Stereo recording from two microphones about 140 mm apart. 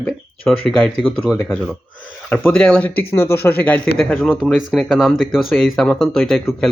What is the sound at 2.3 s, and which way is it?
A man's voice, 10° left (ahead or behind).